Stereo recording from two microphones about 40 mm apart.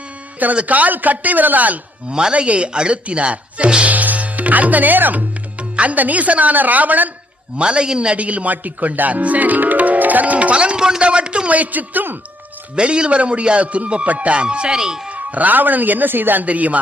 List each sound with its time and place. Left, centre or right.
0.5 s speech: right
2.0 s speech: centre
2.3 s a man's voice: right
3.8 s music: right
5.5 s speech: right
7.6 s speech: right
8.1 s speech: right
12.7 s a man's voice: right
14.4 s speech: right
15.1 s speech: right
16.5 s a man's voice: right